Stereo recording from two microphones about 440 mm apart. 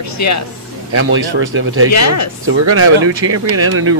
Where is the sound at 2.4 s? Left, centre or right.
Right.